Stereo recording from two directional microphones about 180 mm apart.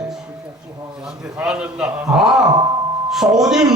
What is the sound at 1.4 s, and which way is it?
A man's voice, 5° right (ahead or behind).